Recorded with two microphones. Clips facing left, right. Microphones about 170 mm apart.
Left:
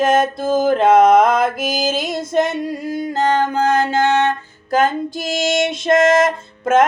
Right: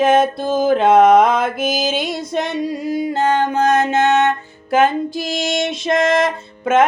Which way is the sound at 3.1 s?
35° left (ahead or behind).